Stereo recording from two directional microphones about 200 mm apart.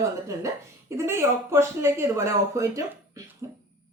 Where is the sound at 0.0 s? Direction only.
15° right (ahead or behind).